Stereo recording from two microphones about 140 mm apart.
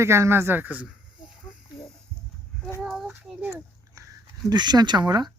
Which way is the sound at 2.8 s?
Centre (ahead or behind).